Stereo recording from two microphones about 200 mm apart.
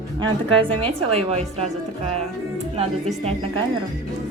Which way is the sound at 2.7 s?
30° right (ahead or behind).